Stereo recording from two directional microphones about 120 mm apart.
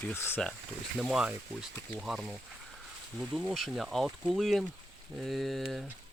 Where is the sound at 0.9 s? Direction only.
5° right (ahead or behind).